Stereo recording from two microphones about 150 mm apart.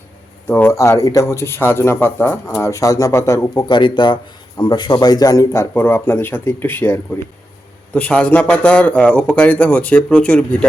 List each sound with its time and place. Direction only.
0.4 s speech: 15° left (ahead or behind)